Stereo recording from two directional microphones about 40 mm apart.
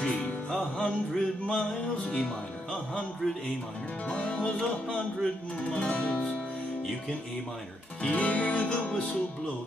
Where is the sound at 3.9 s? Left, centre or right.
Left.